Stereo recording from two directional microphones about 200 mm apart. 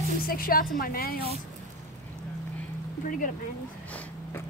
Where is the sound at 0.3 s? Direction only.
45° left (ahead or behind).